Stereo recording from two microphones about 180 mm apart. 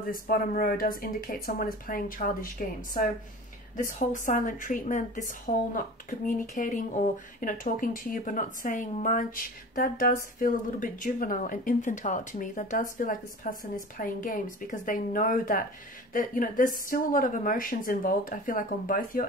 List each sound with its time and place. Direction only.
0.1 s speech: 55° left (ahead or behind)